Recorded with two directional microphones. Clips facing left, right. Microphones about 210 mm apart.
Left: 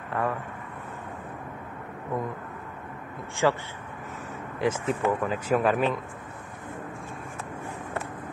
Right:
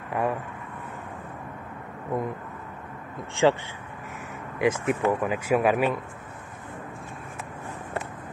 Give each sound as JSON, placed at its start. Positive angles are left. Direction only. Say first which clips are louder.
{"t": 0.1, "sound": "vehicle", "louder": "right 2 dB", "side_deg": -15}
{"t": 3.4, "sound": "speech", "louder": "right 3 dB", "side_deg": -20}